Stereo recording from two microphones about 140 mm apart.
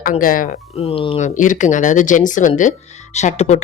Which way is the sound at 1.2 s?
65° left (ahead or behind).